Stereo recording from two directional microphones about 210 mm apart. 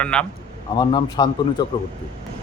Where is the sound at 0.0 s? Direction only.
5° left (ahead or behind).